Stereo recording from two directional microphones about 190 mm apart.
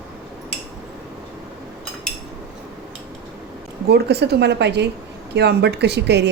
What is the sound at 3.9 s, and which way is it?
Speech, 60° right (ahead or behind).